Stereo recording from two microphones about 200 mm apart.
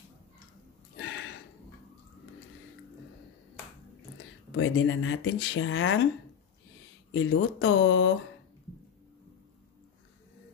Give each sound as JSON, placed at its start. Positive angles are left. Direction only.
{"t": 0.9, "sound": "a sound", "side_deg": 65}
{"t": 4.5, "sound": "speech", "side_deg": 75}
{"t": 7.1, "sound": "speech", "side_deg": 75}